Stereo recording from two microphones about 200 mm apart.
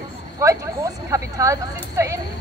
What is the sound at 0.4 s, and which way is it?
Speech, 15° right (ahead or behind).